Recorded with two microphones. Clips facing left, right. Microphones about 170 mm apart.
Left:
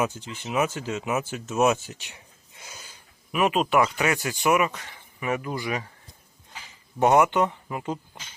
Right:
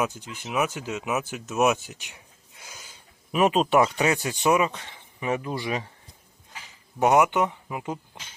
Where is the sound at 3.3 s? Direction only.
30° right (ahead or behind).